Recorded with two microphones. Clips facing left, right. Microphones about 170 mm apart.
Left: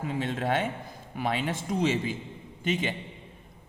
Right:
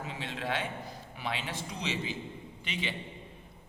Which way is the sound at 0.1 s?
50° left (ahead or behind).